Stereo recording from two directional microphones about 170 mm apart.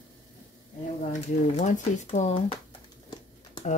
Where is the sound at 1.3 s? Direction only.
45° left (ahead or behind).